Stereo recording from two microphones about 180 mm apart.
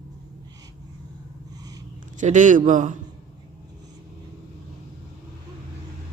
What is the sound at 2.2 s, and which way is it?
Speech, 45° right (ahead or behind).